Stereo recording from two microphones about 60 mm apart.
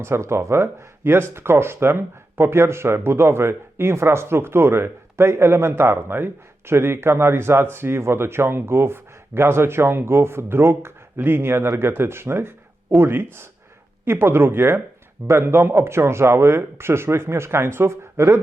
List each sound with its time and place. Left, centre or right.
0.0 s speech: right